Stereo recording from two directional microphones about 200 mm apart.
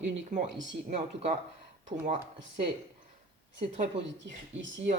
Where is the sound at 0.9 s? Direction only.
35° right (ahead or behind).